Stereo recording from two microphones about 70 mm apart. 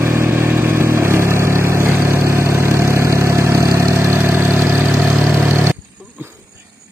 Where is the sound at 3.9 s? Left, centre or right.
Right.